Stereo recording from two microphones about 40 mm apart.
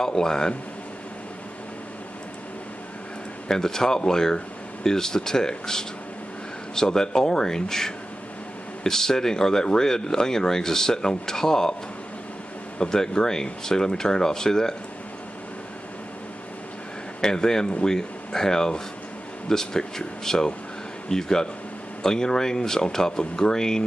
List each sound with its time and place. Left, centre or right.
0.0 s speech: centre
3.4 s speech: centre
12.7 s speech: centre
17.2 s speech: centre